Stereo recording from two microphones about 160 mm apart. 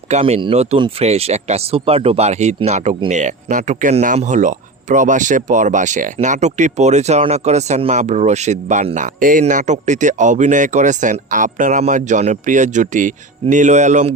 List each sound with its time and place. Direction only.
0.1 s speech: 40° right (ahead or behind)